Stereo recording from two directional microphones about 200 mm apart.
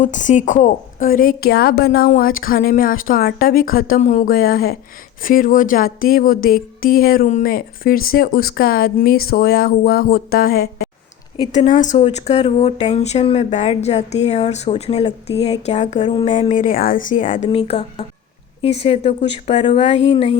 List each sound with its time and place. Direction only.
0.0 s a woman's voice: 40° left (ahead or behind)
11.5 s speech: 35° left (ahead or behind)
16.0 s a sound: 25° left (ahead or behind)
16.3 s speech: 35° left (ahead or behind)